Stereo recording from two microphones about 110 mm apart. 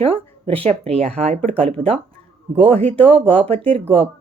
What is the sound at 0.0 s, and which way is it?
Speech, 55° right (ahead or behind).